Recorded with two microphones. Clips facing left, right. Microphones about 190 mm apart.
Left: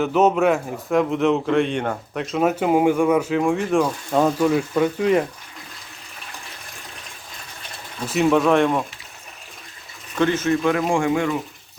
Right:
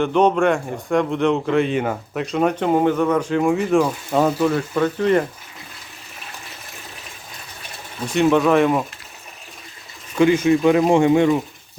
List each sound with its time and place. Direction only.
0.0 s a man's voice: 5° left (ahead or behind)
4.4 s speech: 10° left (ahead or behind)
8.0 s a man's voice: centre (ahead or behind)
10.2 s speech: 10° right (ahead or behind)